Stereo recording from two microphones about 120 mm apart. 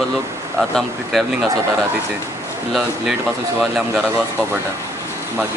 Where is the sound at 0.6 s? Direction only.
Centre (ahead or behind).